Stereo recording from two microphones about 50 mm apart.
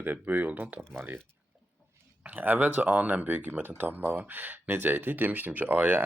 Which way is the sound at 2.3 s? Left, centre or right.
Right.